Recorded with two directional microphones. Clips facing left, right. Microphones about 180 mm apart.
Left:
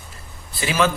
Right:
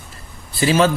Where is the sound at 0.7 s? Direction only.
30° right (ahead or behind).